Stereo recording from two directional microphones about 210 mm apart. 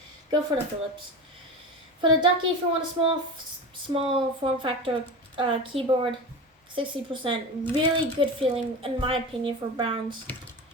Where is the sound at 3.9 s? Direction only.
25° right (ahead or behind).